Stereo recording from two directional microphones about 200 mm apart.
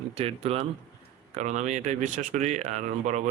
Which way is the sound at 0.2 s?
30° right (ahead or behind).